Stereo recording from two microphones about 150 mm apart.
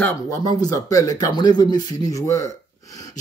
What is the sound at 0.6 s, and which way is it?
Speech, 25° left (ahead or behind).